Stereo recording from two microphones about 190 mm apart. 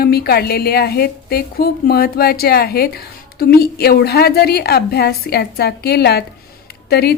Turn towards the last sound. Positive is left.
turn(degrees=55)  # may be behind; listen again after turning